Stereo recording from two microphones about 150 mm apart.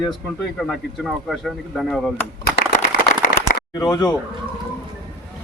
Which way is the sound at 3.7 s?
25° left (ahead or behind).